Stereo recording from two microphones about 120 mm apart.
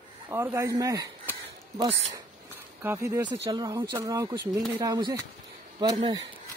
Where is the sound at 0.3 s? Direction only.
20° right (ahead or behind).